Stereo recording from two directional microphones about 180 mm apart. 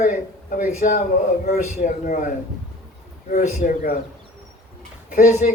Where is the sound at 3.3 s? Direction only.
45° left (ahead or behind).